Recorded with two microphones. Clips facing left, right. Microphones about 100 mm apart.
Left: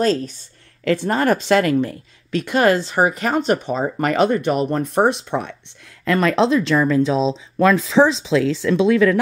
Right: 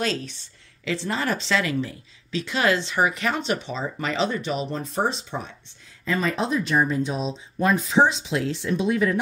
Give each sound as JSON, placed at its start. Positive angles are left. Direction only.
{"t": 0.0, "sound": "speech", "side_deg": 40}
{"t": 6.0, "sound": "speech", "side_deg": 75}